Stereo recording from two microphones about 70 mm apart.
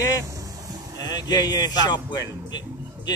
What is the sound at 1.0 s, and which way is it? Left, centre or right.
A man's voice, left.